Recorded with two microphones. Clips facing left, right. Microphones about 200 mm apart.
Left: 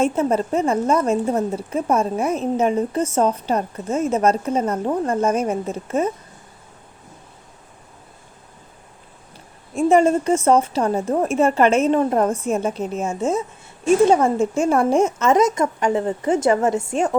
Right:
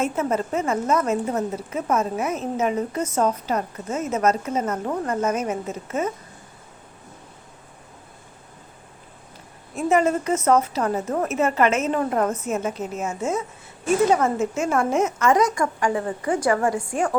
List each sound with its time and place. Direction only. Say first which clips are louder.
0.0 s a woman's voice: left 4 dB; 30° left (ahead or behind)
9.7 s a woman's voice: left 5 dB; 30° left (ahead or behind)